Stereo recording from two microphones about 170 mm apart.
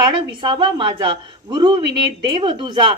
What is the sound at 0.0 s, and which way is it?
A woman's voice, 25° right (ahead or behind).